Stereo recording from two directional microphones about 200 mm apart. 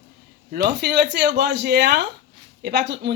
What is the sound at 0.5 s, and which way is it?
A woman's voice, 55° right (ahead or behind).